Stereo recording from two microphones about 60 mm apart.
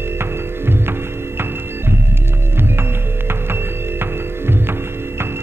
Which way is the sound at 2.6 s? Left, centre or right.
Right.